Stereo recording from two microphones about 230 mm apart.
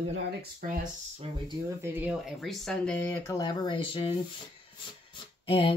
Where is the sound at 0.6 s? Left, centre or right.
Right.